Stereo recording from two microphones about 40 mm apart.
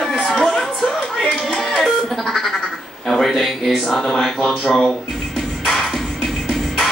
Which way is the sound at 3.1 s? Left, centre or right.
Centre.